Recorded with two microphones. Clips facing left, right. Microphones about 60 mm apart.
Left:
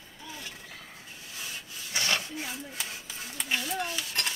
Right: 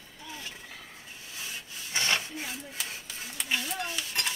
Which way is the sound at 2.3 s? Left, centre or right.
Centre.